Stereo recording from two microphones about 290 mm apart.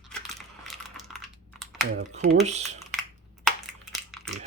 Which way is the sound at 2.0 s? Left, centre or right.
Right.